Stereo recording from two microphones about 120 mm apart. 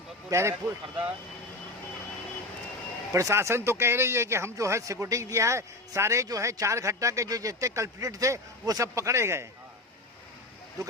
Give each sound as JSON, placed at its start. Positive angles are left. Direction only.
{"t": 0.3, "sound": "speech", "side_deg": -25}
{"t": 3.1, "sound": "speech", "side_deg": -25}